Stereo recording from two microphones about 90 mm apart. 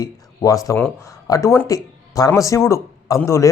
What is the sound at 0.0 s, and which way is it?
Speech, 40° left (ahead or behind).